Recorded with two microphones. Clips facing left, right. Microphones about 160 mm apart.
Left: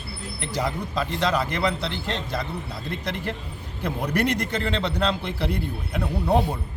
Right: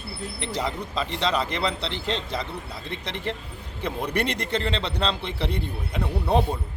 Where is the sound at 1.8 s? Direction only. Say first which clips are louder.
Even; 30° right (ahead or behind).